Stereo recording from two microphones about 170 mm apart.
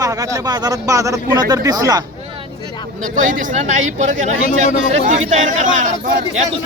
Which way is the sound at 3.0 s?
50° right (ahead or behind).